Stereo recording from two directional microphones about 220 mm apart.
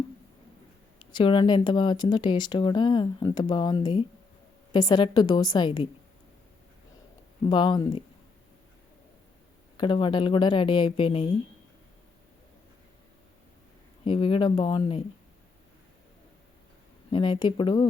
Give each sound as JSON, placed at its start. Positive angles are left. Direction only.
{"t": 1.1, "sound": "speech", "side_deg": 20}
{"t": 7.4, "sound": "speech", "side_deg": 20}
{"t": 9.7, "sound": "speech", "side_deg": 20}
{"t": 14.0, "sound": "speech", "side_deg": 25}
{"t": 17.1, "sound": "speech", "side_deg": 25}